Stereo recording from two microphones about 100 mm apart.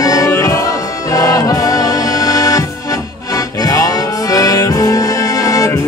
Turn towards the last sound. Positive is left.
turn(degrees=35)  # may be behind; listen again after turning